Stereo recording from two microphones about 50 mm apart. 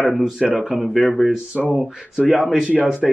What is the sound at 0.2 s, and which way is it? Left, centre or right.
Speech, centre.